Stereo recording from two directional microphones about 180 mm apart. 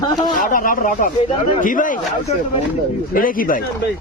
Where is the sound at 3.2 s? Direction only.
50° left (ahead or behind).